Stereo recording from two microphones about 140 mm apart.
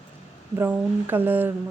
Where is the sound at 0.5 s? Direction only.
15° right (ahead or behind).